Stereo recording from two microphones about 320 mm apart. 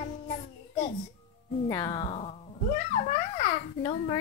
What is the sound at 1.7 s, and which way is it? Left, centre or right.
Speech, centre.